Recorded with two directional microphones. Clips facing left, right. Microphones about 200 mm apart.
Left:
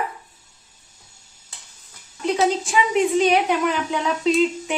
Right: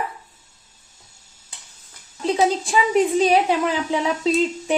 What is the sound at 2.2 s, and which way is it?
A woman's voice, 35° right (ahead or behind).